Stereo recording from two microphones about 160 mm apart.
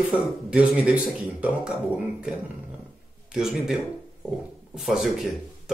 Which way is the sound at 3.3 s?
5° right (ahead or behind).